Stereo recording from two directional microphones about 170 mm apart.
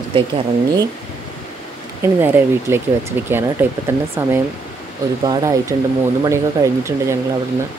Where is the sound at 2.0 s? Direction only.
15° right (ahead or behind).